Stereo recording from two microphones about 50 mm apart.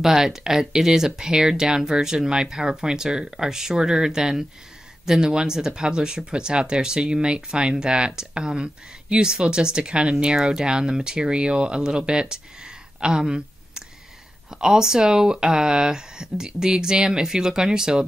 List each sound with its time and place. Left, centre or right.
0.0 s speech: centre